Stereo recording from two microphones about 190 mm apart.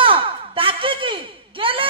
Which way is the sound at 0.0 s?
30° right (ahead or behind).